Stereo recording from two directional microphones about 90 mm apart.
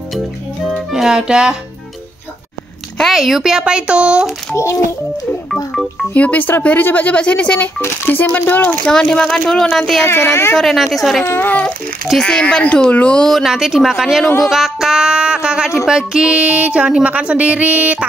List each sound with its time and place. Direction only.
0.7 s music: centre (ahead or behind)
3.0 s a sound: centre (ahead or behind)
4.6 s a child's voice: 35° left (ahead or behind)
5.7 s speech: centre (ahead or behind)
6.1 s speech: 15° left (ahead or behind)
10.0 s speech: 25° left (ahead or behind)
10.5 s speech: centre (ahead or behind)
11.2 s speech: 25° left (ahead or behind)
12.1 s speech: 10° left (ahead or behind)
13.4 s speech: 5° right (ahead or behind)
14.4 s a sound: centre (ahead or behind)